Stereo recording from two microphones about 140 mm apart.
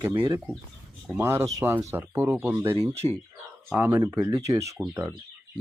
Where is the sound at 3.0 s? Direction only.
40° right (ahead or behind).